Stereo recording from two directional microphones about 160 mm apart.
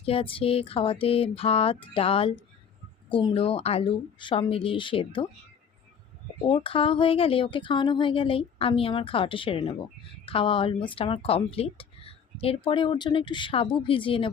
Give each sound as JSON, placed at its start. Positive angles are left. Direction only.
{"t": 0.0, "sound": "speech", "side_deg": 35}
{"t": 6.5, "sound": "speech", "side_deg": 35}